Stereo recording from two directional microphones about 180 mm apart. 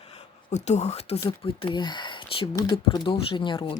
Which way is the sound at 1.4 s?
30° left (ahead or behind).